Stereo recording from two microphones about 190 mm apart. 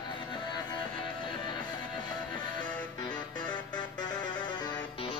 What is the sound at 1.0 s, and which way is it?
Music, 25° left (ahead or behind).